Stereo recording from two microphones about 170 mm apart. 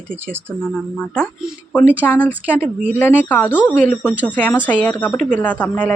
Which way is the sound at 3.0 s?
10° left (ahead or behind).